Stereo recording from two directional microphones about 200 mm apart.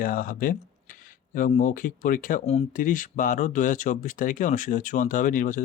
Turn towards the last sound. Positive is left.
turn(degrees=40)  # may be behind; listen again after turning